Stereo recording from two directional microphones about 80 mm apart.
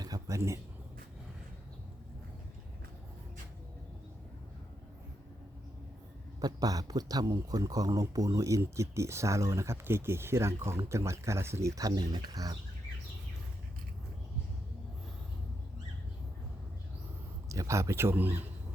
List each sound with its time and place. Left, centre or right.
0.0 s a sound: right
6.4 s speech: right
17.5 s speech: right